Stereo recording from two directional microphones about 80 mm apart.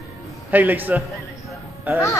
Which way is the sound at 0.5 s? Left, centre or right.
Right.